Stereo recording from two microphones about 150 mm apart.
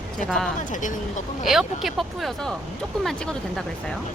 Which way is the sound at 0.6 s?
60° left (ahead or behind).